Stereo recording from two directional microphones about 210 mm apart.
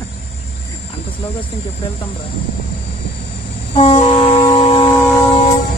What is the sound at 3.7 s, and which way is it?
Train, 30° left (ahead or behind).